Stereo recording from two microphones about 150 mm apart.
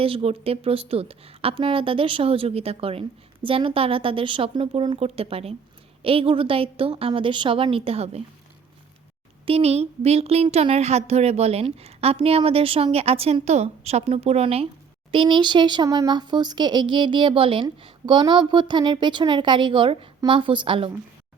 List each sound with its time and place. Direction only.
0.0 s speech: 40° right (ahead or behind)
9.5 s speech: 45° right (ahead or behind)